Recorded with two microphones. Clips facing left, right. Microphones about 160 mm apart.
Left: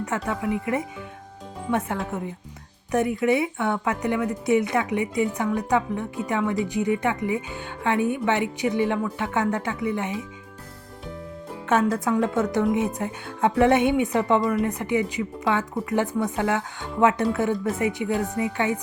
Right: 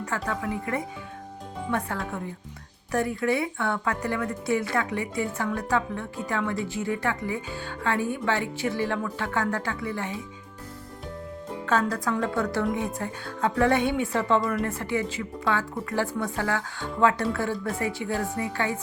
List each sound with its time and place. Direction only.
0.0 s speech: 20° left (ahead or behind)
11.6 s speech: 25° left (ahead or behind)